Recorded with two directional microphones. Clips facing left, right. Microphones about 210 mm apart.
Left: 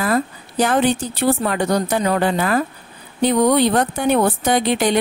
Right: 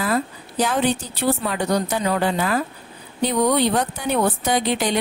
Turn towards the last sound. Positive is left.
turn(degrees=60)  # may be behind; listen again after turning